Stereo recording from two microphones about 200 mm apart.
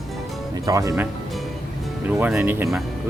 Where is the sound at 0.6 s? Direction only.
15° right (ahead or behind).